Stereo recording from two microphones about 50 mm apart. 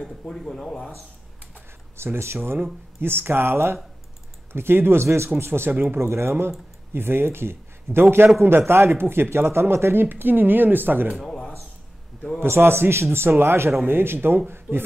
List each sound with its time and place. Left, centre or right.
0.0 s speech: centre
2.0 s a man's voice: right
10.0 s speech: right
12.4 s a man's voice: right
13.8 s speech: right